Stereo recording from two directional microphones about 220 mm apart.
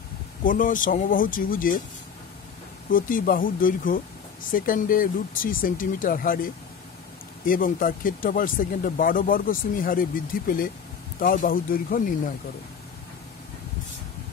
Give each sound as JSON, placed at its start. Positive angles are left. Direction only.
{"t": 0.4, "sound": "speech", "side_deg": 40}
{"t": 2.9, "sound": "speech", "side_deg": 40}